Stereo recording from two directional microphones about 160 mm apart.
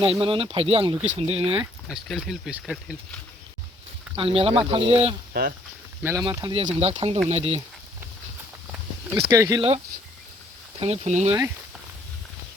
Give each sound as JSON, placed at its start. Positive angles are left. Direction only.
{"t": 0.0, "sound": "speech", "side_deg": -35}
{"t": 1.9, "sound": "speech", "side_deg": 0}
{"t": 4.2, "sound": "speech", "side_deg": -35}
{"t": 5.3, "sound": "speech", "side_deg": -70}
{"t": 6.0, "sound": "speech", "side_deg": -15}
{"t": 6.2, "sound": "speech", "side_deg": -25}
{"t": 6.6, "sound": "speech", "side_deg": -40}
{"t": 8.7, "sound": "a sound", "side_deg": -15}
{"t": 9.6, "sound": "speech", "side_deg": -35}